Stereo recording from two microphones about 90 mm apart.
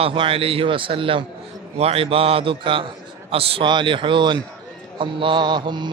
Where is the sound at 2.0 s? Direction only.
90° right; by 4.4 s 60° right (ahead or behind).